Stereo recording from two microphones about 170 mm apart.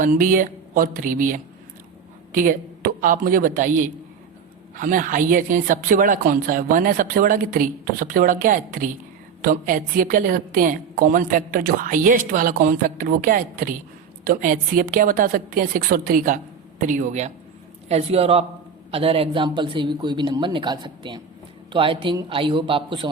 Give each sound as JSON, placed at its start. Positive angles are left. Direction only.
{"t": 0.0, "sound": "a woman's voice", "side_deg": -50}